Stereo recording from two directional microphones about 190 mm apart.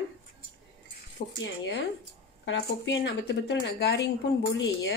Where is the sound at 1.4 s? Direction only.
65° left (ahead or behind).